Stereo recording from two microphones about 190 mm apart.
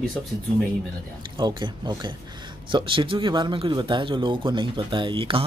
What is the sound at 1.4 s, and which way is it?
Speech, 25° right (ahead or behind).